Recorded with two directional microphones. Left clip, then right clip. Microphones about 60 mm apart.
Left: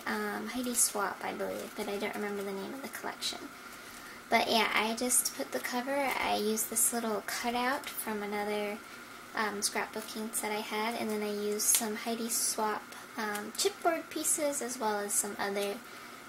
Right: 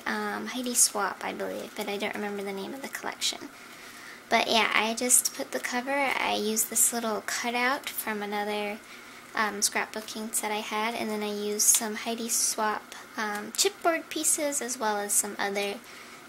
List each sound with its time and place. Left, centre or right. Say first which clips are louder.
0.0 s a woman's voice: right 4 dB; right